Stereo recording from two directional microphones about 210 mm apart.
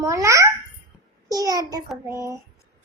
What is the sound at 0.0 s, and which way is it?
A child's voice, 15° right (ahead or behind).